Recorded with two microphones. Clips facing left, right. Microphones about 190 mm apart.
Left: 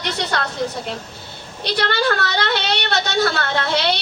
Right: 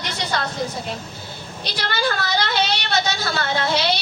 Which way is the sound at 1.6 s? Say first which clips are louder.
Left 5 dB; 60° left (ahead or behind).